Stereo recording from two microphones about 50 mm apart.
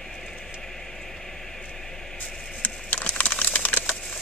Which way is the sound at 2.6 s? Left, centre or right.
Left.